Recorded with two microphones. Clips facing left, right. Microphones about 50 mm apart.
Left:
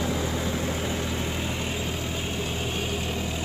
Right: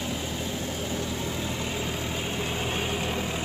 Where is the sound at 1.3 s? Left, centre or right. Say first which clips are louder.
Left 1 dB; left.